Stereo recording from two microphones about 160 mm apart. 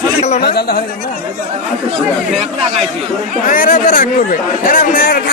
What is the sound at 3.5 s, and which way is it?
Speech, 55° left (ahead or behind).